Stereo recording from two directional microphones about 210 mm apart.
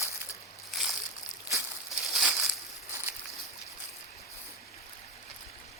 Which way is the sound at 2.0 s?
Centre (ahead or behind).